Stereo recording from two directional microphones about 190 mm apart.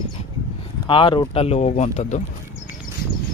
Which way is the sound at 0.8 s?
25° left (ahead or behind).